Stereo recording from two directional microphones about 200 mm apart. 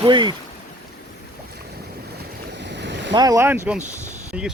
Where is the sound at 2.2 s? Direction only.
60° right (ahead or behind).